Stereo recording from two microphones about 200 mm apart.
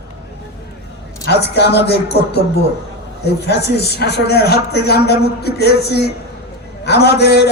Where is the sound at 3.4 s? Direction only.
55° left (ahead or behind).